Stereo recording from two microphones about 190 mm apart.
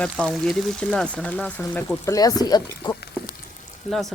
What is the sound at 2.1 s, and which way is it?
Speech, 20° left (ahead or behind).